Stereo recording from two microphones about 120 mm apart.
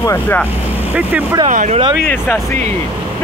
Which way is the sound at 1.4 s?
75° right (ahead or behind).